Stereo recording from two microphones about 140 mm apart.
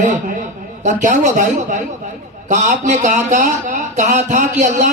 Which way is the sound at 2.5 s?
60° right (ahead or behind).